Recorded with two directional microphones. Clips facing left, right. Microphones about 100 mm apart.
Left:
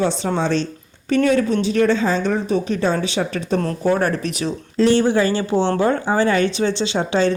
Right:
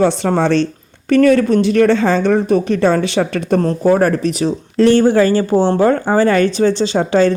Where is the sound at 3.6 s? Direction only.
35° right (ahead or behind).